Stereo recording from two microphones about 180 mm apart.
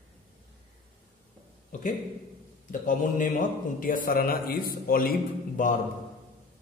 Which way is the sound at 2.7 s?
45° left (ahead or behind).